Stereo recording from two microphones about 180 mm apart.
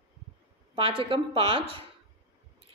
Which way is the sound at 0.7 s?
30° right (ahead or behind).